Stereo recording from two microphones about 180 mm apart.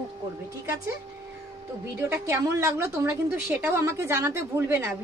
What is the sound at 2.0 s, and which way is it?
A woman's voice, 15° right (ahead or behind).